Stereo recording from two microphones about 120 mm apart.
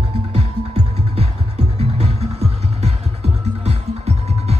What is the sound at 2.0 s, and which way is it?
Music, 65° right (ahead or behind).